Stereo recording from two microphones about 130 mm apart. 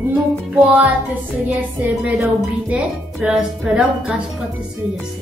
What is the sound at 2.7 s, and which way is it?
Speech, 5° right (ahead or behind).